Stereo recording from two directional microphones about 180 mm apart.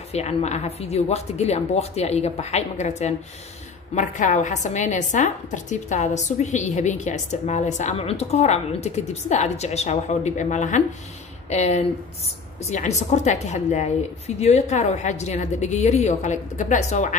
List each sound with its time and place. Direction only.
0.1 s a woman's voice: 35° left (ahead or behind)